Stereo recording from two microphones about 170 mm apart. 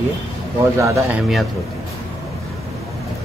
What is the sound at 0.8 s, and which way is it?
Speech, 15° right (ahead or behind).